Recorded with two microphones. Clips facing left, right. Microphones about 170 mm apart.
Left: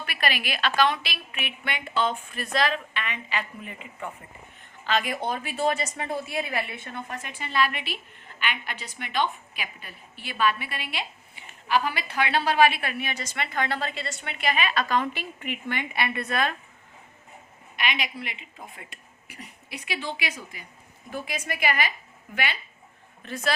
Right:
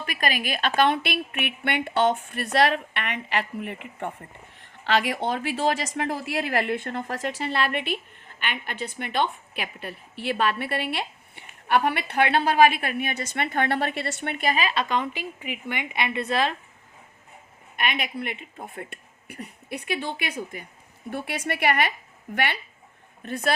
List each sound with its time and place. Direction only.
0.0 s a woman's voice: 45° right (ahead or behind); by 4.1 s 65° right (ahead or behind)
4.8 s a woman's voice: 80° right; by 14.5 s 50° right (ahead or behind)
14.5 s speech: 30° right (ahead or behind)
15.0 s a woman's voice: 10° right (ahead or behind); by 16.6 s 30° right (ahead or behind)
17.7 s a woman's voice: 55° right (ahead or behind)
21.1 s a woman's voice: 70° right (ahead or behind)